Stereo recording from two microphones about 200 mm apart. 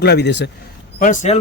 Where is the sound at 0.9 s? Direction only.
40° left (ahead or behind).